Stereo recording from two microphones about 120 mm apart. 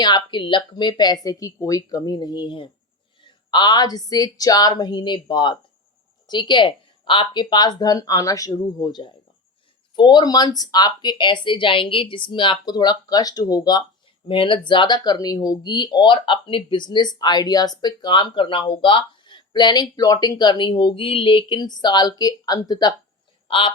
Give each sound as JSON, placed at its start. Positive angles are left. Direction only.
{"t": 0.0, "sound": "speech", "side_deg": 40}
{"t": 14.3, "sound": "speech", "side_deg": 45}
{"t": 23.5, "sound": "a woman's voice", "side_deg": 45}